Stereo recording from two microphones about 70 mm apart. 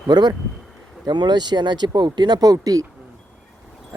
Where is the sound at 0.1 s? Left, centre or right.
Right.